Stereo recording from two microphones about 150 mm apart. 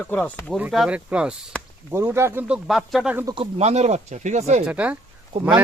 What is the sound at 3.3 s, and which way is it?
Speech, 40° right (ahead or behind).